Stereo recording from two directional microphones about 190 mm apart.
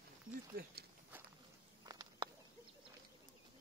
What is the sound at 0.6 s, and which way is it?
Speech, 55° right (ahead or behind).